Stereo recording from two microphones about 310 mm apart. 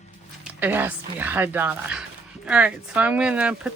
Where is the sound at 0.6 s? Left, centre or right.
Centre.